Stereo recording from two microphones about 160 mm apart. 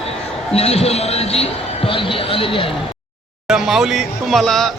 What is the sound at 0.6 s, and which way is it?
Speech, 40° left (ahead or behind).